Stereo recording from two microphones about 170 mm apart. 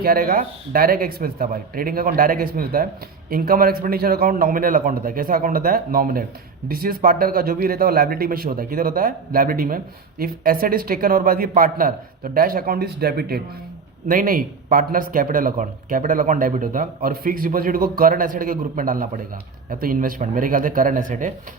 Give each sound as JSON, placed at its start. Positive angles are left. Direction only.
{"t": 0.0, "sound": "speech", "side_deg": -60}